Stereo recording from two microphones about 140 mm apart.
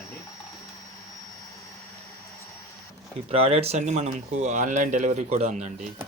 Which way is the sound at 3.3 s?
45° right (ahead or behind).